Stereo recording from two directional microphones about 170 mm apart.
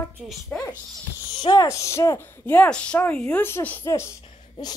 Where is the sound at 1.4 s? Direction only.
25° left (ahead or behind).